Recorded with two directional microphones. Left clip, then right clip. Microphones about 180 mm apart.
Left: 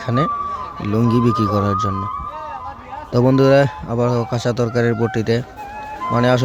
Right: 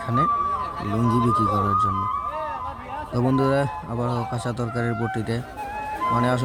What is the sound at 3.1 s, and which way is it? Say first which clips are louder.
Speech: left 9 dB; 25° left (ahead or behind).